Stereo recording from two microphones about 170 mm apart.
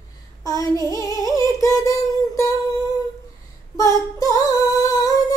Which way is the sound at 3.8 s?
20° left (ahead or behind).